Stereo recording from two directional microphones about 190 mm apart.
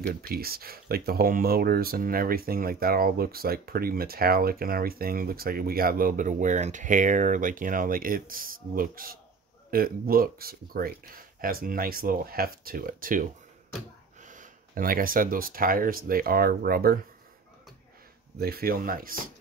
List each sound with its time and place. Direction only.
0.3 s speech: 50° right (ahead or behind)
18.4 s speech: 55° right (ahead or behind)